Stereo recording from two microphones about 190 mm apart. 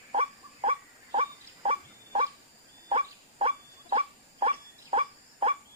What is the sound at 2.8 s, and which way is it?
Dog, 30° right (ahead or behind).